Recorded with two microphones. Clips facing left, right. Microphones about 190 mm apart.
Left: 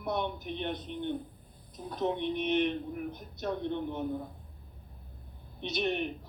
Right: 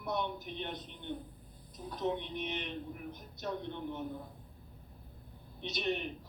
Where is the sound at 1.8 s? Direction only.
60° left (ahead or behind).